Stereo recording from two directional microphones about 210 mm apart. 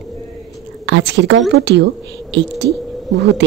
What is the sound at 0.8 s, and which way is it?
A woman's voice, 60° right (ahead or behind).